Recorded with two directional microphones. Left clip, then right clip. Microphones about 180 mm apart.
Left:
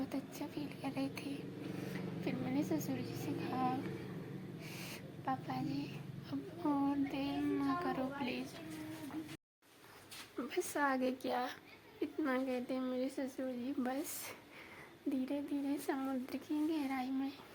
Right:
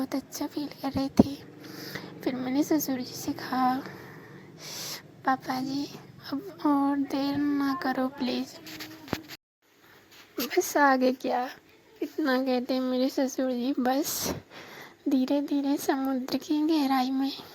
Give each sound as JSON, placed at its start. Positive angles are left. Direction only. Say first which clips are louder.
{"t": 0.0, "sound": "a woman's voice", "louder": "right 10 dB", "side_deg": -40}
{"t": 10.5, "sound": "a woman's voice", "louder": "right 14 dB", "side_deg": -45}
{"t": 12.5, "sound": "speech", "louder": "right 12 dB", "side_deg": -50}
{"t": 15.1, "sound": "speech", "louder": "right 14 dB", "side_deg": -45}